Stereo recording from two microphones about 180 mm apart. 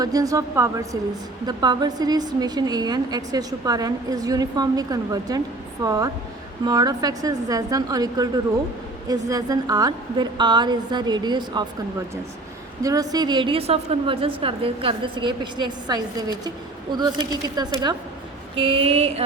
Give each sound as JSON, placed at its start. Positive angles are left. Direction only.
{"t": 0.0, "sound": "a woman's voice", "side_deg": -20}
{"t": 12.8, "sound": "a woman's voice", "side_deg": -20}
{"t": 18.5, "sound": "a sound", "side_deg": -30}